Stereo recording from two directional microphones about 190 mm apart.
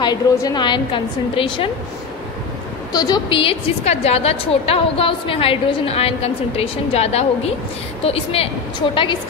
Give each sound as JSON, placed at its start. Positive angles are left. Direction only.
{"t": 0.0, "sound": "a woman's voice", "side_deg": 20}
{"t": 2.9, "sound": "a woman's voice", "side_deg": 20}